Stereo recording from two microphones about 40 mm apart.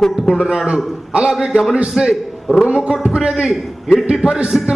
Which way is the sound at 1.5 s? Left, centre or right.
Centre.